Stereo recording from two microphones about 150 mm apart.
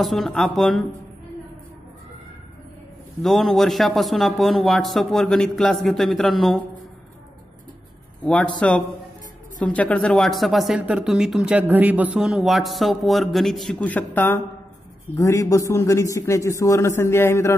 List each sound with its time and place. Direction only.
0.0 s speech: centre (ahead or behind)
3.2 s speech: centre (ahead or behind)
8.2 s speech: 5° left (ahead or behind)